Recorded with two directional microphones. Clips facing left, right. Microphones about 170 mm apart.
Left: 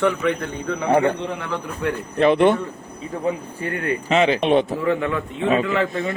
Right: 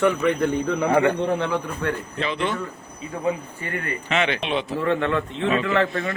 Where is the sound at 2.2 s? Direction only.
55° left (ahead or behind).